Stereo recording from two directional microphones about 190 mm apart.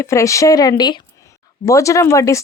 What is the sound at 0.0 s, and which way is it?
Speech, 15° left (ahead or behind).